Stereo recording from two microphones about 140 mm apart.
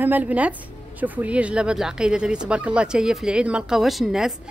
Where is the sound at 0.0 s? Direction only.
10° right (ahead or behind).